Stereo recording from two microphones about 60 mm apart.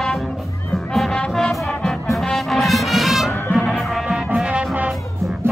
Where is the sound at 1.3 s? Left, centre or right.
Centre.